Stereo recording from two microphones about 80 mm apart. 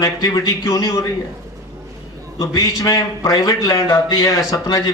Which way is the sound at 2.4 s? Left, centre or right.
Left.